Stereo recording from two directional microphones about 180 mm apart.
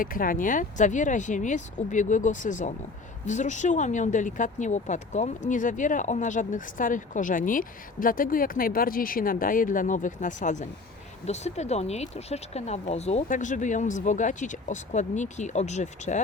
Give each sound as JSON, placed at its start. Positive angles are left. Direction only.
{"t": 0.0, "sound": "speech", "side_deg": 50}